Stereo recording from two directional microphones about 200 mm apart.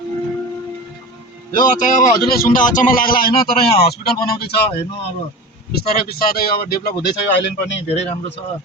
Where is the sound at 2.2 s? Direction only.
45° left (ahead or behind).